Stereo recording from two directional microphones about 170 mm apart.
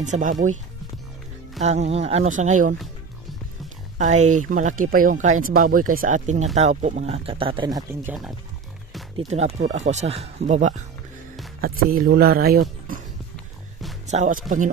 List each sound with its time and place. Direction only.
0.0 s speech: 45° right (ahead or behind)
1.6 s speech: 40° right (ahead or behind)
4.0 s speech: 45° right (ahead or behind); by 8.2 s 15° right (ahead or behind)
9.3 s speech: 40° right (ahead or behind)
11.6 s speech: 60° right (ahead or behind)
14.0 s speech: 45° right (ahead or behind)